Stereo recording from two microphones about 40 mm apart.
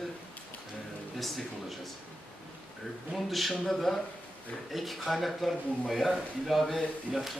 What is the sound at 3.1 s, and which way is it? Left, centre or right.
Speech, centre.